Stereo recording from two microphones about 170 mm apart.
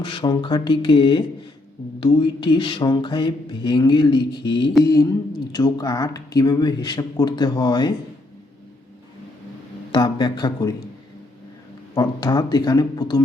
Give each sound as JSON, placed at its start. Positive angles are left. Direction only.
{"t": 0.0, "sound": "speech", "side_deg": 30}
{"t": 9.9, "sound": "speech", "side_deg": 25}
{"t": 11.9, "sound": "speech", "side_deg": 25}